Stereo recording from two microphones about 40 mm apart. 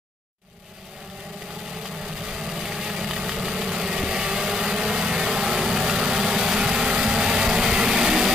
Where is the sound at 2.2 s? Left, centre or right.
Centre.